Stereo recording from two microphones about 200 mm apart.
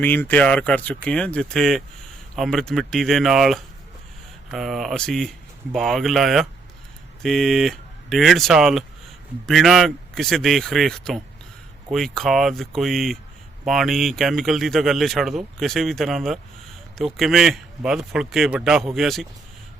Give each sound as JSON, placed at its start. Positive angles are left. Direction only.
{"t": 0.0, "sound": "speech", "side_deg": 10}